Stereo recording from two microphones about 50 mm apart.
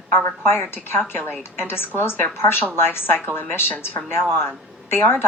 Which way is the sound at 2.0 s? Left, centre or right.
Left.